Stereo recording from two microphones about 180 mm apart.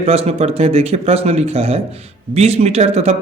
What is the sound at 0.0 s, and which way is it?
Speech, 35° right (ahead or behind).